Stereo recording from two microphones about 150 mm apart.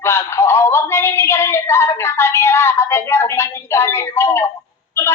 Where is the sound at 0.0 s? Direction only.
15° left (ahead or behind).